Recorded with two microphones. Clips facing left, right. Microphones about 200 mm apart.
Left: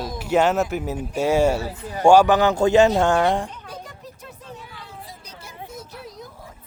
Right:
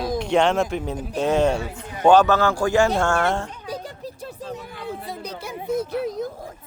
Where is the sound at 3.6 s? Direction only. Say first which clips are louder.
Right 6 dB; 30° right (ahead or behind).